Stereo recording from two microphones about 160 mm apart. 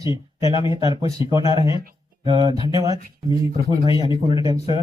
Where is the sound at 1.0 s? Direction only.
25° right (ahead or behind).